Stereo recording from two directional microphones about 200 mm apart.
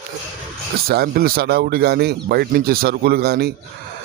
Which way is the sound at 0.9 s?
50° right (ahead or behind).